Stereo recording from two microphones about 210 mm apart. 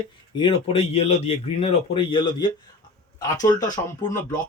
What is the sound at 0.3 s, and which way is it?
A man's voice, 25° left (ahead or behind).